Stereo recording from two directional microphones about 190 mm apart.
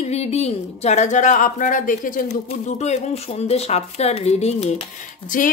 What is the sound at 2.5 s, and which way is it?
Speech, 35° left (ahead or behind).